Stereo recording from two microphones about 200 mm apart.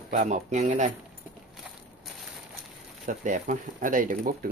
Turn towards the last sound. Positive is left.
turn(degrees=-45)  # may be behind; listen again after turning